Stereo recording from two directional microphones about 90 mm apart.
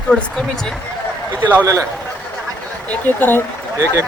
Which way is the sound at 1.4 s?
20° right (ahead or behind).